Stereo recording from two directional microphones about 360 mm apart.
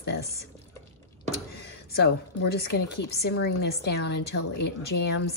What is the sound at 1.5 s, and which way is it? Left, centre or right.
A woman's voice, left.